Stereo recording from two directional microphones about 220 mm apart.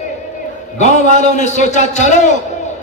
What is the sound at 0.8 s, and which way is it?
A man's voice, 30° left (ahead or behind).